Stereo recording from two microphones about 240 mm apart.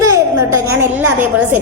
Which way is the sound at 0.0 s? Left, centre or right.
Centre.